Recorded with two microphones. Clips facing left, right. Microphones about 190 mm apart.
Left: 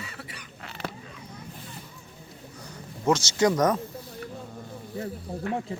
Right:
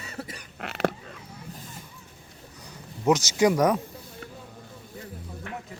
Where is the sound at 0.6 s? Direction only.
65° right (ahead or behind).